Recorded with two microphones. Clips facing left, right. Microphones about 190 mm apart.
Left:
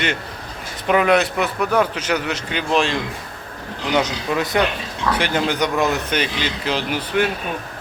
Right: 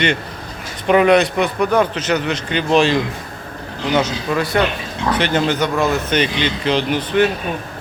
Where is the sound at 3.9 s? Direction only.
15° left (ahead or behind).